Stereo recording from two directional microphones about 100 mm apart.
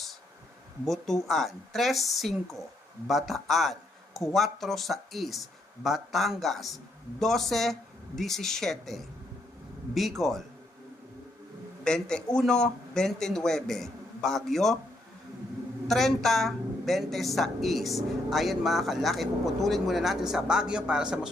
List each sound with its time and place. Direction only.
0.9 s a woman's voice: centre (ahead or behind)
11.9 s a woman's voice: 5° left (ahead or behind)
15.9 s a woman's voice: 5° left (ahead or behind)